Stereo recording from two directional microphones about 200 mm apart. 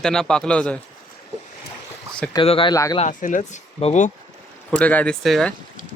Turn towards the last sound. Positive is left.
turn(degrees=5)  # may be behind; listen again after turning